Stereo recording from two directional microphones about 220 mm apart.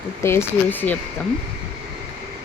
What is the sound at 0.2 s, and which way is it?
Speech, 10° left (ahead or behind).